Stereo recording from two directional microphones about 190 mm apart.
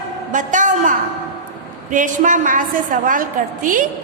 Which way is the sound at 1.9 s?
45° right (ahead or behind).